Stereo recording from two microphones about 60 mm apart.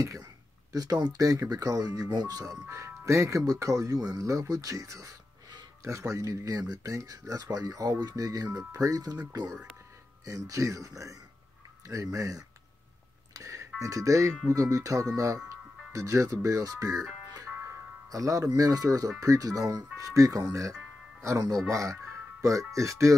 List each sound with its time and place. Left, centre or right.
0.0 s speech: right
0.7 s speech: right
2.7 s speech: right
4.2 s speech: right
8.5 s speech: right
10.2 s speech: right
18.1 s speech: right
21.2 s speech: right